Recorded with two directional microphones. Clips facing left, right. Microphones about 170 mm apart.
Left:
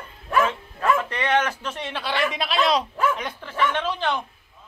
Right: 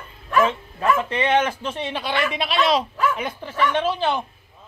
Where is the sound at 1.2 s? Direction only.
10° right (ahead or behind).